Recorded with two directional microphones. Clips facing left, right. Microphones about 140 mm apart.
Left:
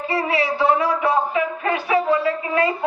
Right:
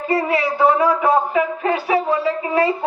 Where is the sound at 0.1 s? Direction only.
50° right (ahead or behind).